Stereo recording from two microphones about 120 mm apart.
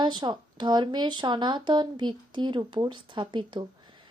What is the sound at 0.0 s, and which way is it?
Speech, 40° right (ahead or behind).